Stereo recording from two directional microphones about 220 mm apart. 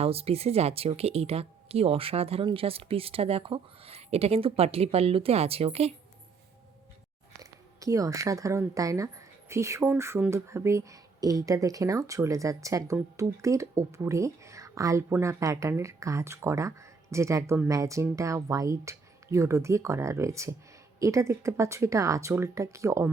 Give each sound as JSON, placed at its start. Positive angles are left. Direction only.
{"t": 0.0, "sound": "speech", "side_deg": -25}
{"t": 7.8, "sound": "speech", "side_deg": -15}